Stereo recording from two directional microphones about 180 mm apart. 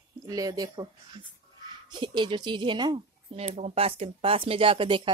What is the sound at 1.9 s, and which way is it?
Speech, 25° right (ahead or behind).